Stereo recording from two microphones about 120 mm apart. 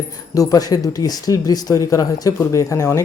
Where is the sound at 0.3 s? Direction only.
30° left (ahead or behind).